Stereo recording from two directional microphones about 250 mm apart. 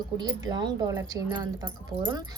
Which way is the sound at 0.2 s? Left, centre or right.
Centre.